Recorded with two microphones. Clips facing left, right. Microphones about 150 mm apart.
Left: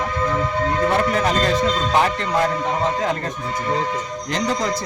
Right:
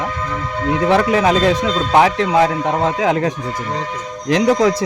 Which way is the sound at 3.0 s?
90° right.